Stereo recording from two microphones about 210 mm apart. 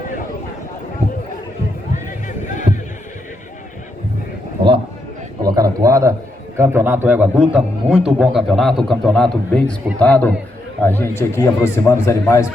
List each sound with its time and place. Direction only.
1.9 s run: 35° left (ahead or behind)
5.4 s a sound: 20° right (ahead or behind)
6.6 s a man's voice: 10° right (ahead or behind); by 12.5 s 15° left (ahead or behind)